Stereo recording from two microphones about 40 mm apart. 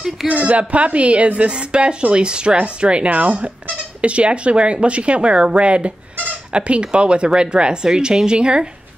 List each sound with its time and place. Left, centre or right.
0.3 s a woman's voice: right